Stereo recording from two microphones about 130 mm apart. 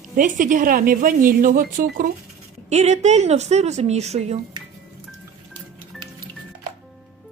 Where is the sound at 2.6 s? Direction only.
60° right (ahead or behind).